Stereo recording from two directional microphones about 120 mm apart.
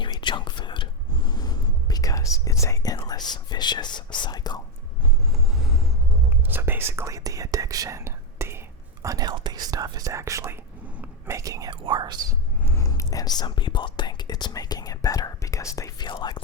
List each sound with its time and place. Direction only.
0.0 s whispering: 40° left (ahead or behind)
5.3 s vehicle: 5° right (ahead or behind)
6.3 s whispering: 15° right (ahead or behind)
11.7 s whispering: 40° right (ahead or behind)
12.6 s whispering: 25° left (ahead or behind)